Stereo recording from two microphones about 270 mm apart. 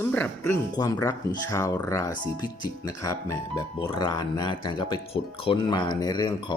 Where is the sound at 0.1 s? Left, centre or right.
Centre.